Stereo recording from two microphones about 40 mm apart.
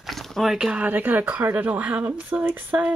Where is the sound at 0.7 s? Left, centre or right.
Right.